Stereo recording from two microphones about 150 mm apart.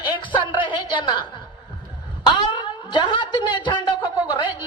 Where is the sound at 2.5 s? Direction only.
30° left (ahead or behind).